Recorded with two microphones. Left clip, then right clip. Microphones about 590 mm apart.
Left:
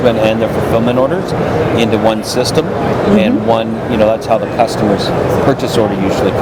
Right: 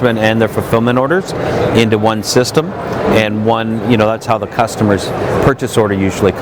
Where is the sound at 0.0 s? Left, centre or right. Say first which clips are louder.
Left 2 dB; right.